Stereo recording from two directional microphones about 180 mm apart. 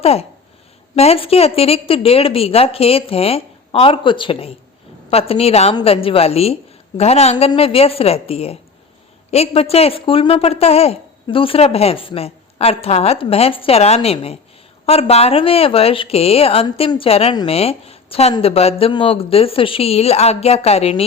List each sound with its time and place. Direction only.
0.0 s a woman's voice: 35° left (ahead or behind)